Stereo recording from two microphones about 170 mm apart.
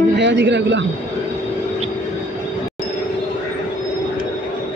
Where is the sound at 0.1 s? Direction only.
90° right.